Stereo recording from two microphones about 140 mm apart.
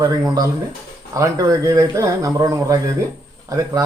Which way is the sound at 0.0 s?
25° right (ahead or behind).